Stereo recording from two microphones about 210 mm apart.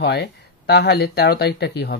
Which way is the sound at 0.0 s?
50° left (ahead or behind).